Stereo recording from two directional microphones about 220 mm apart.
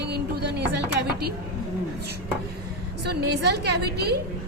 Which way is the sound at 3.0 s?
45° right (ahead or behind).